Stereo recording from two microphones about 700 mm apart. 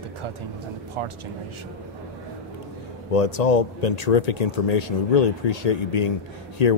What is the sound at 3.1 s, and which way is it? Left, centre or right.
Speech, left.